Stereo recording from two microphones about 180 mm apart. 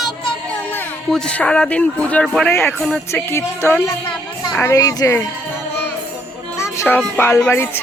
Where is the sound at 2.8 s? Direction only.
Centre (ahead or behind).